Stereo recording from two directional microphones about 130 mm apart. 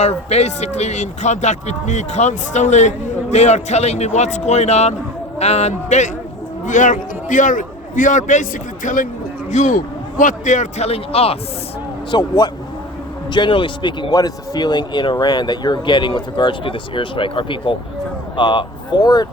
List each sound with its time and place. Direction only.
0.0 s speech: 55° left (ahead or behind)
6.7 s a man's voice: 75° left (ahead or behind)
9.5 s a man's voice: 70° left (ahead or behind); by 11.3 s 50° left (ahead or behind)
12.1 s speech: 35° left (ahead or behind)
13.3 s speech: 40° left (ahead or behind)